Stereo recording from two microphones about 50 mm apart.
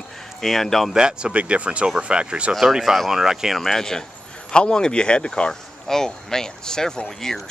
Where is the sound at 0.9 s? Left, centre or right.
Centre.